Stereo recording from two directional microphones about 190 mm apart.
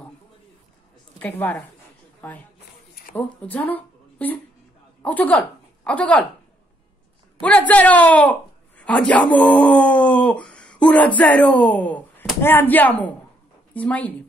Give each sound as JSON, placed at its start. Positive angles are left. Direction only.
{"t": 1.2, "sound": "a woman's voice", "side_deg": 10}
{"t": 7.4, "sound": "a woman's voice", "side_deg": 10}